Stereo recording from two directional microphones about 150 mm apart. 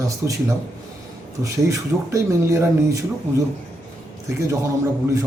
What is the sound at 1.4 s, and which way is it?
Speech, 20° right (ahead or behind).